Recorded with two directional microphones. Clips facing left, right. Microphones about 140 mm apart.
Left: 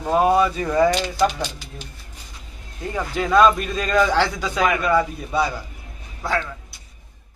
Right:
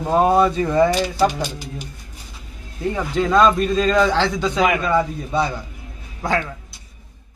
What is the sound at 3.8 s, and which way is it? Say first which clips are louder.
Speech: right 1 dB; 10° left (ahead or behind).